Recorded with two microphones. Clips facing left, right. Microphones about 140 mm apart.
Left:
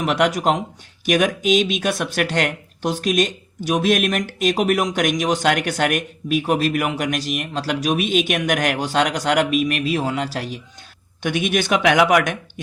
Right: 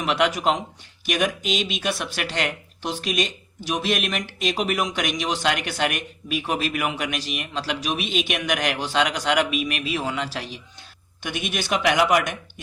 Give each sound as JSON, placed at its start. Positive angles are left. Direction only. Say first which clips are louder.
{"t": 0.0, "sound": "speech", "louder": "left 3 dB", "side_deg": 45}
{"t": 11.2, "sound": "speech", "louder": "left 8 dB", "side_deg": 55}